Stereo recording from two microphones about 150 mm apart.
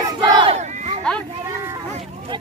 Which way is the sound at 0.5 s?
45° right (ahead or behind).